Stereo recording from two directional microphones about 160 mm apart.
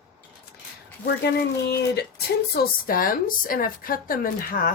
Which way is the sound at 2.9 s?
60° left (ahead or behind).